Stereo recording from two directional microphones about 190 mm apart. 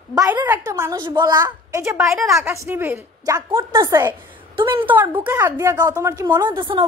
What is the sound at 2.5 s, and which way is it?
A woman's voice, 10° right (ahead or behind).